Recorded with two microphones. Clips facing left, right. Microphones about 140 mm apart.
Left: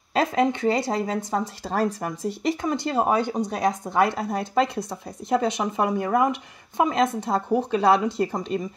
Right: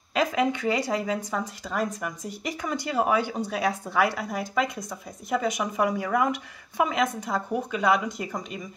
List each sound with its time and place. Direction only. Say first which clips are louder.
0.1 s speech: left 3 dB; 30° left (ahead or behind)